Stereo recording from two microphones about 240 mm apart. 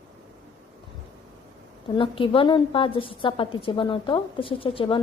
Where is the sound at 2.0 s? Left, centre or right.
Left.